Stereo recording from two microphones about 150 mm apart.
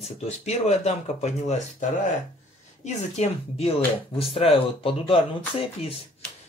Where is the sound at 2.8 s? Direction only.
45° left (ahead or behind).